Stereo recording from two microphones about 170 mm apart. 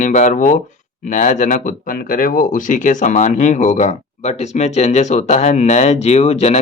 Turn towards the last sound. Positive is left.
turn(degrees=40)  # may be behind; listen again after turning